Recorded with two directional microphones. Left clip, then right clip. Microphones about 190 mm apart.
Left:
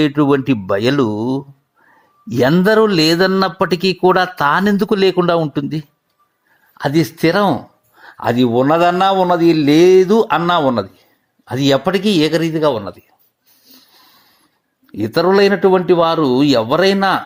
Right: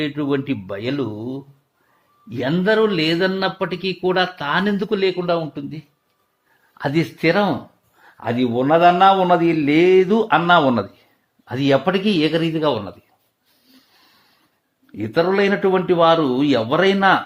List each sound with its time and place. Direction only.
0.0 s speech: 35° left (ahead or behind)
2.3 s speech: 30° left (ahead or behind); by 5.8 s 45° left (ahead or behind)
6.7 s a man's voice: 15° left (ahead or behind)
13.9 s wheeze: 15° left (ahead or behind)
14.9 s a man's voice: 25° left (ahead or behind)